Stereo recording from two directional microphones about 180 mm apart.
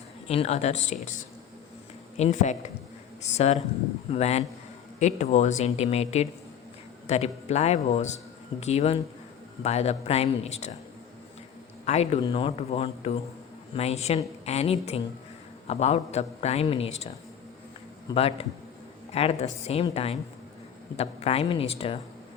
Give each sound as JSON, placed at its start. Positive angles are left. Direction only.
{"t": 0.3, "sound": "a man's voice", "side_deg": 35}
{"t": 11.9, "sound": "a man's voice", "side_deg": 35}
{"t": 18.1, "sound": "a man's voice", "side_deg": 30}